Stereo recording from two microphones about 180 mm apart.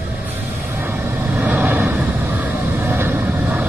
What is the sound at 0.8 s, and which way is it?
Vehicle, 10° right (ahead or behind).